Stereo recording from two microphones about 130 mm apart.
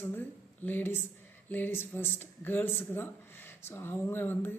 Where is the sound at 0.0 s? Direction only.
15° left (ahead or behind).